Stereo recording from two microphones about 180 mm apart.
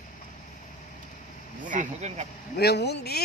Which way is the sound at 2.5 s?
65° left (ahead or behind).